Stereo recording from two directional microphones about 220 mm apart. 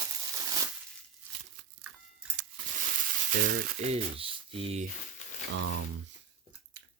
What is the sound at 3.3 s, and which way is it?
Speech, 45° right (ahead or behind).